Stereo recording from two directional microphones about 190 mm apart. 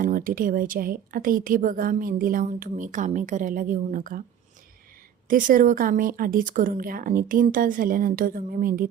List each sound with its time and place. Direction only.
0.0 s a woman's voice: 45° right (ahead or behind)
5.3 s a woman's voice: 45° right (ahead or behind)